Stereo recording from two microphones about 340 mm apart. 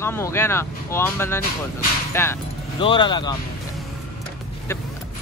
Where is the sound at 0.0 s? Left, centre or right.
Centre.